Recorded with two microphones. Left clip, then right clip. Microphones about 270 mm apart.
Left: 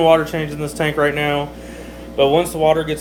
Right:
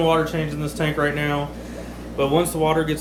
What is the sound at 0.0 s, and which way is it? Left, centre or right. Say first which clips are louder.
Speech: left 6 dB; centre.